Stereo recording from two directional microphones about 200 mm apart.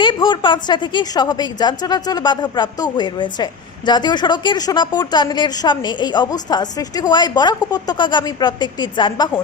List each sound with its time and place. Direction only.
0.0 s a woman's voice: 25° left (ahead or behind)